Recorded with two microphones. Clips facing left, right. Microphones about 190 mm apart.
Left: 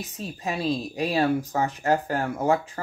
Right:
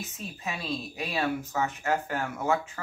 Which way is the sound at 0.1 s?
35° left (ahead or behind).